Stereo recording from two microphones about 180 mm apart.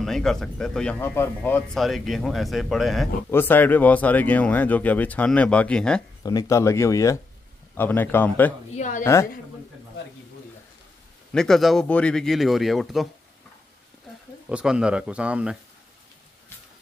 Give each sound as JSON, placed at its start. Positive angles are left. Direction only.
{"t": 0.0, "sound": "speech", "side_deg": 0}
{"t": 3.3, "sound": "speech", "side_deg": 10}
{"t": 6.2, "sound": "speech", "side_deg": 20}
{"t": 8.7, "sound": "a woman's voice", "side_deg": 45}
{"t": 9.0, "sound": "speech", "side_deg": 15}
{"t": 11.3, "sound": "speech", "side_deg": 0}
{"t": 14.5, "sound": "speech", "side_deg": -5}